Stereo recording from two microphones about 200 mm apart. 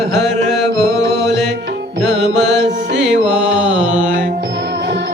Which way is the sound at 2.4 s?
60° right (ahead or behind).